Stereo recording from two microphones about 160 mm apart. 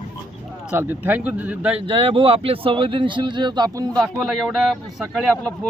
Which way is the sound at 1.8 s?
35° right (ahead or behind).